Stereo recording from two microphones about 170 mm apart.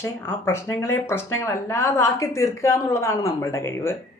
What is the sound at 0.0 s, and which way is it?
Speech, 15° left (ahead or behind).